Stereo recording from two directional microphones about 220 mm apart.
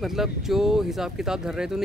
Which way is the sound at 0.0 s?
Centre (ahead or behind).